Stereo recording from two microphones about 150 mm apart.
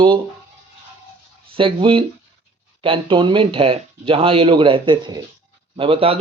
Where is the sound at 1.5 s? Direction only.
35° right (ahead or behind).